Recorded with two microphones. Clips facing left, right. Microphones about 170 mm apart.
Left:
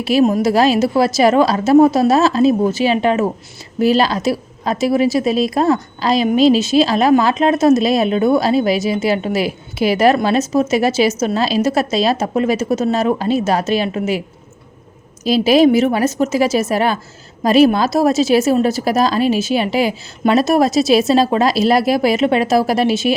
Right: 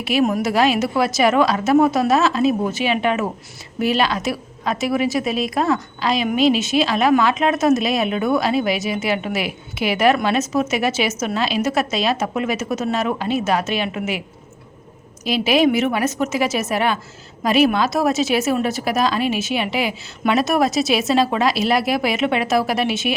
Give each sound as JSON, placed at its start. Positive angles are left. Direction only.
{"t": 0.0, "sound": "a woman's voice", "side_deg": 35}
{"t": 15.2, "sound": "a woman's voice", "side_deg": 35}